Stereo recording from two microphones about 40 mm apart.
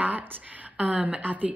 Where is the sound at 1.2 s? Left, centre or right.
Right.